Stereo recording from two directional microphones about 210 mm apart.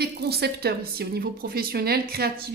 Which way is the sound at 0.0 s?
50° right (ahead or behind).